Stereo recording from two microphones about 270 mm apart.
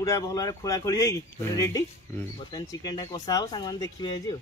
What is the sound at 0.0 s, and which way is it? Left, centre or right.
Speech, centre.